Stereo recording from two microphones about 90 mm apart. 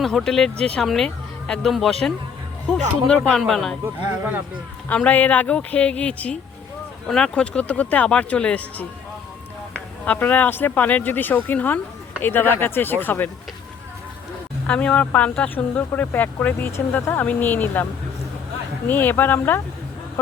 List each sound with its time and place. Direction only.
0.0 s speech: 5° left (ahead or behind)
3.8 s speech: 25° right (ahead or behind)
4.9 s speech: 15° left (ahead or behind)
10.1 s speech: 20° left (ahead or behind)
14.7 s speech: 15° left (ahead or behind)
18.9 s speech: 20° left (ahead or behind)